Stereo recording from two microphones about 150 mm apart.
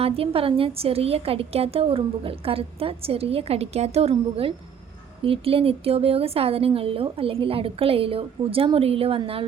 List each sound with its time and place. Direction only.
0.0 s a woman's voice: 40° right (ahead or behind)